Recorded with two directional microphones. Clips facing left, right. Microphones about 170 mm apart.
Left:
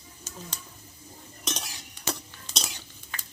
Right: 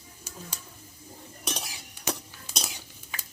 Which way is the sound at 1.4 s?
10° right (ahead or behind).